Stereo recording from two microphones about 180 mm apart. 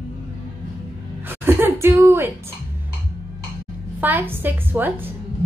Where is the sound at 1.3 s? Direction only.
10° right (ahead or behind).